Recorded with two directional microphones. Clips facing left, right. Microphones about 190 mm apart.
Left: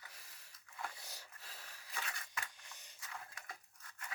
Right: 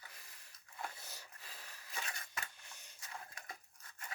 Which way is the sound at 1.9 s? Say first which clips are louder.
Even; 20° right (ahead or behind).